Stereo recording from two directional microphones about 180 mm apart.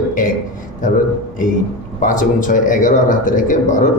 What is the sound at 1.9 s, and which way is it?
A man's voice, 45° left (ahead or behind).